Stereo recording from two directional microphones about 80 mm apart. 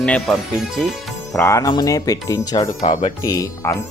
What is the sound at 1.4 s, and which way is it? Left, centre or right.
Speech, left.